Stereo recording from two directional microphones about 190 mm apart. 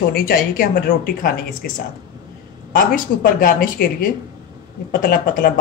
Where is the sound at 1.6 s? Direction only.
55° left (ahead or behind).